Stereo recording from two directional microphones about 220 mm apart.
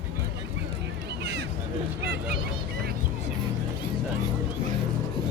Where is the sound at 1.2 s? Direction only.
50° right (ahead or behind).